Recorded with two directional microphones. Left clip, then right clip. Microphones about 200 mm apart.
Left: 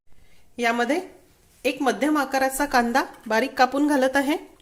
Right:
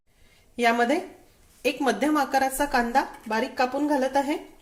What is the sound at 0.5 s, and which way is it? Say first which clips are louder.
A woman's voice: right 1 dB; 5° left (ahead or behind).